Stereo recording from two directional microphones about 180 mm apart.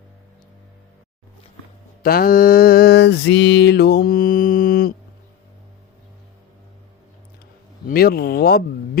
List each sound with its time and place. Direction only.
2.0 s mantra: 55° left (ahead or behind)
7.9 s speech: 55° left (ahead or behind)